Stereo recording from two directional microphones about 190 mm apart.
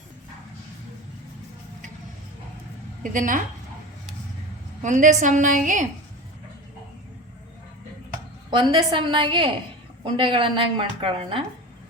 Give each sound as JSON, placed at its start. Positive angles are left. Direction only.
{"t": 3.0, "sound": "a woman's voice", "side_deg": -45}
{"t": 4.8, "sound": "a woman's voice", "side_deg": -40}
{"t": 8.4, "sound": "a woman's voice", "side_deg": -25}